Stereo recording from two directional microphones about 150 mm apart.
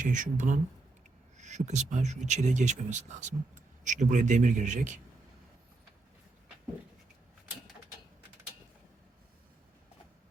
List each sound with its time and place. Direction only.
0.0 s a man's voice: 60° right (ahead or behind)